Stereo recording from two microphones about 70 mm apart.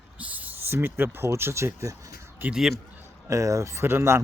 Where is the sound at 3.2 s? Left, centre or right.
Right.